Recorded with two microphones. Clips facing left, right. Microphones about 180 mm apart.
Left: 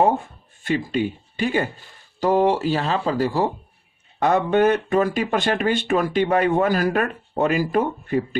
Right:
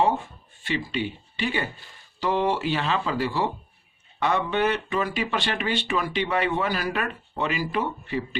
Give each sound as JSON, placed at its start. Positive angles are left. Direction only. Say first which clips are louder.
{"t": 0.6, "sound": "speech", "louder": "left 6 dB", "side_deg": 45}